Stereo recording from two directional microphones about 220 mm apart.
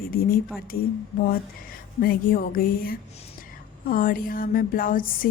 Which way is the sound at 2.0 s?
40° left (ahead or behind).